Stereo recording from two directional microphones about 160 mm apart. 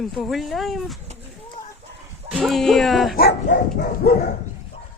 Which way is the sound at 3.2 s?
85° left.